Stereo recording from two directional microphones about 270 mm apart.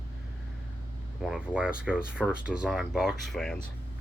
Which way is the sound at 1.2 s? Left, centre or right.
Centre.